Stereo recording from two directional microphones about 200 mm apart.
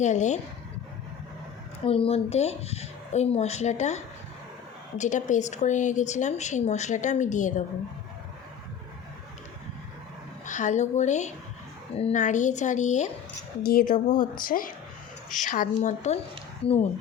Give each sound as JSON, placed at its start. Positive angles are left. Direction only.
{"t": 0.0, "sound": "speech", "side_deg": 35}
{"t": 1.8, "sound": "speech", "side_deg": 30}
{"t": 10.4, "sound": "speech", "side_deg": 40}